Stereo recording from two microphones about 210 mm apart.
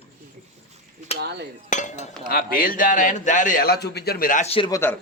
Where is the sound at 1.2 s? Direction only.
55° right (ahead or behind).